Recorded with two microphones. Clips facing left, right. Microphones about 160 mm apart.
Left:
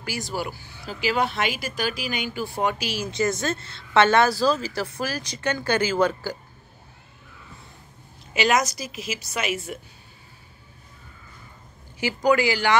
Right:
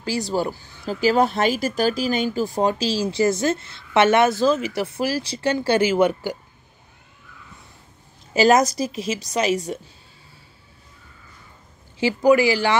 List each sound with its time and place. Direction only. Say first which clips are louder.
0.0 s speech: right 7 dB; 35° right (ahead or behind)
8.3 s speech: right 6 dB; 35° right (ahead or behind)
12.0 s speech: right 5 dB; 25° right (ahead or behind)